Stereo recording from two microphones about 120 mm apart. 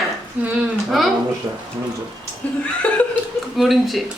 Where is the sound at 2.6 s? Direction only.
10° left (ahead or behind).